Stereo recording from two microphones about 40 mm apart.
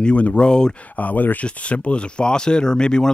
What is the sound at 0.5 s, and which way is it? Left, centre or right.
Speech, centre.